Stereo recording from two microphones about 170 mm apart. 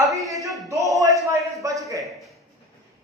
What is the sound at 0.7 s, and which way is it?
A man's voice, 20° right (ahead or behind).